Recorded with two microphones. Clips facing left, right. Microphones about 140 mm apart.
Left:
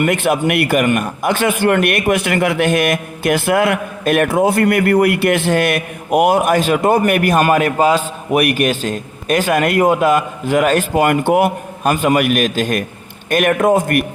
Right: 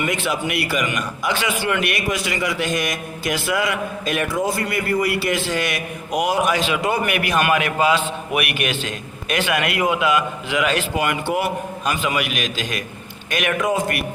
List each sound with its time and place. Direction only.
0.0 s a man's voice: 55° left (ahead or behind)